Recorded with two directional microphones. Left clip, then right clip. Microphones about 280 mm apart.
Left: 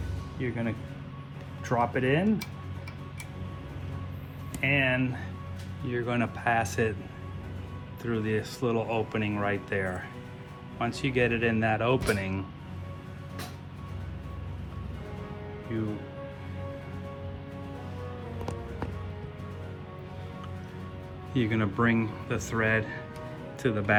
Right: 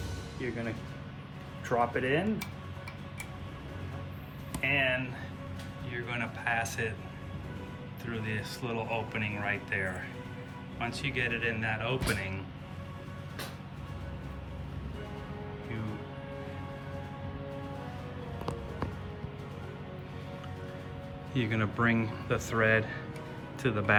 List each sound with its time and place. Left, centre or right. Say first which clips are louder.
0.4 s speech: left 3 dB; centre
4.6 s speech: left 3 dB; left
8.0 s speech: left 7 dB; centre
21.3 s speech: left 3 dB; centre